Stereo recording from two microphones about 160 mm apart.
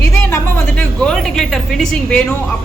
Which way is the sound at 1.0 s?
Centre (ahead or behind).